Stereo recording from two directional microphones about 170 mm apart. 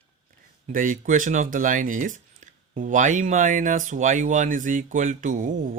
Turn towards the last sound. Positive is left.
turn(degrees=-50)  # may be behind; listen again after turning